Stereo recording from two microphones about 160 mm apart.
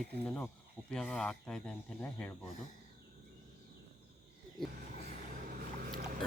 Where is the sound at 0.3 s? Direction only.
5° left (ahead or behind).